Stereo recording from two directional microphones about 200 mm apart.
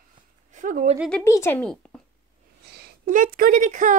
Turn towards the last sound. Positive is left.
turn(degrees=-40)  # may be behind; listen again after turning